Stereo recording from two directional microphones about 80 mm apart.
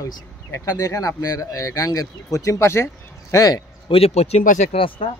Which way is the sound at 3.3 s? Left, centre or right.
Left.